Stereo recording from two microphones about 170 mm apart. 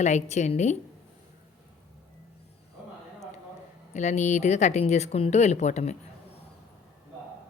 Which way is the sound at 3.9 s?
40° left (ahead or behind).